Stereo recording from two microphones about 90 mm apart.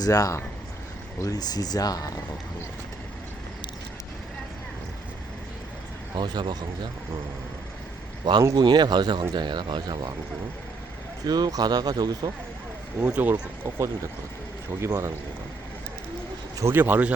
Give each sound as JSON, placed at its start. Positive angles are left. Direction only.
{"t": 0.0, "sound": "speech", "side_deg": 40}
{"t": 6.1, "sound": "speech", "side_deg": -55}
{"t": 8.2, "sound": "speech", "side_deg": -60}
{"t": 11.3, "sound": "speech", "side_deg": -45}
{"t": 13.0, "sound": "speech", "side_deg": -20}
{"t": 13.7, "sound": "speech", "side_deg": -30}
{"t": 16.6, "sound": "speech", "side_deg": -20}